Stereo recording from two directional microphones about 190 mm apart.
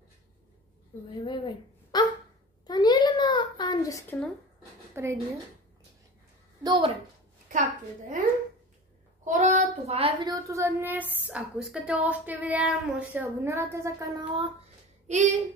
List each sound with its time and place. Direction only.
1.2 s speech: 25° left (ahead or behind)
2.6 s a sound: 20° left (ahead or behind)
4.9 s a woman's voice: 15° right (ahead or behind)
6.6 s a child's voice: 25° right (ahead or behind)
9.2 s a woman's voice: 40° right (ahead or behind); by 14.5 s 20° right (ahead or behind)
15.0 s speech: 40° right (ahead or behind)